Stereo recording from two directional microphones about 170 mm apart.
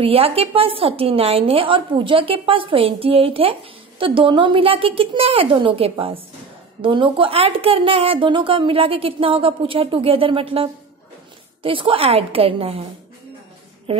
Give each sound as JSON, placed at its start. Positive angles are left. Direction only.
{"t": 0.0, "sound": "a woman's voice", "side_deg": -35}
{"t": 13.9, "sound": "speech", "side_deg": -35}